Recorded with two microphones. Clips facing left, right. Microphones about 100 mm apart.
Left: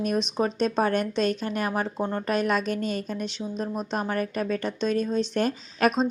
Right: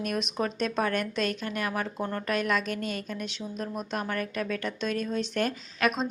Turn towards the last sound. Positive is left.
turn(degrees=35)  # may be behind; listen again after turning